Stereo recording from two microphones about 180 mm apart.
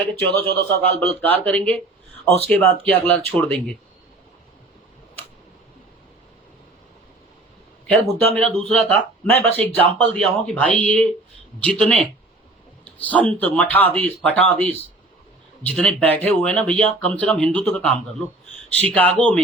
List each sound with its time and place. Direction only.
0.3 s speech: 25° right (ahead or behind)
0.6 s speech: 10° left (ahead or behind)
7.9 s a man's voice: 5° left (ahead or behind)